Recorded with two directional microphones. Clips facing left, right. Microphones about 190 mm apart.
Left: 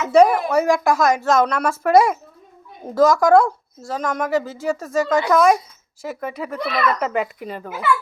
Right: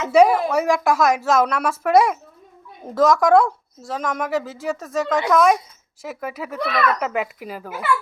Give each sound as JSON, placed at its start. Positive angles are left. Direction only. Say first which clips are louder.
{"t": 0.1, "sound": "a woman's voice", "louder": "left 1 dB", "side_deg": -5}